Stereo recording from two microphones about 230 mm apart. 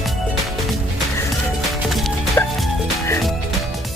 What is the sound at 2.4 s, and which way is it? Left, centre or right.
Music, centre.